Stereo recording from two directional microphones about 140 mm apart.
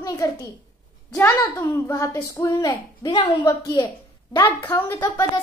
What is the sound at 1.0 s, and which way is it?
A woman's voice, 15° left (ahead or behind).